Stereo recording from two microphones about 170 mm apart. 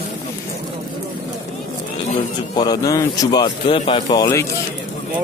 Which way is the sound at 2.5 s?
25° left (ahead or behind).